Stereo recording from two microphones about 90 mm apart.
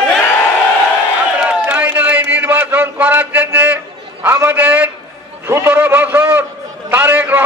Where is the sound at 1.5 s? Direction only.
15° right (ahead or behind).